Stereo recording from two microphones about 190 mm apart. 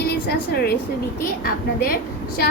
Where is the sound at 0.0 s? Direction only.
55° left (ahead or behind).